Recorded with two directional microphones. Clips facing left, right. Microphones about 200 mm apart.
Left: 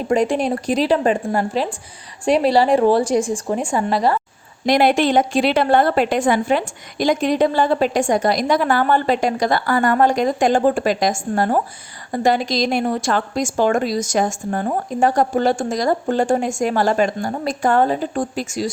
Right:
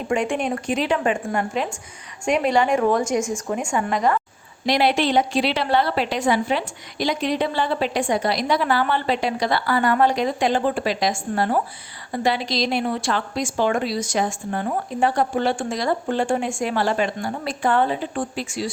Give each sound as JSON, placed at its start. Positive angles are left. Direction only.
{"t": 0.1, "sound": "a woman's voice", "side_deg": 35}
{"t": 4.6, "sound": "a woman's voice", "side_deg": 50}